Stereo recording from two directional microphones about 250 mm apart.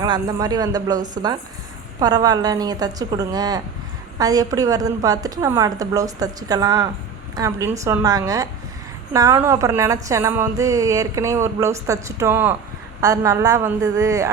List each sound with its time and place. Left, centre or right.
0.0 s a woman's voice: centre